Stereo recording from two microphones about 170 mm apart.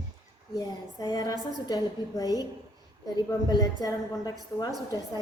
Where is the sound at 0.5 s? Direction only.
20° left (ahead or behind).